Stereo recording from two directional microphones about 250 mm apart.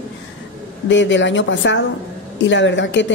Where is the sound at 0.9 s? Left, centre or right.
Left.